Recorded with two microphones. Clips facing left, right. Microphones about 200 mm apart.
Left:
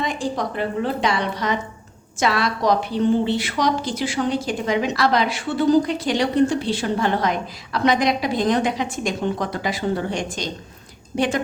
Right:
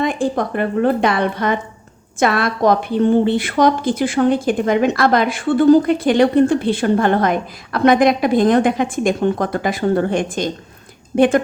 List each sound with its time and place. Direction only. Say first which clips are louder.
0.0 s a woman's voice: right 6 dB; 55° right (ahead or behind)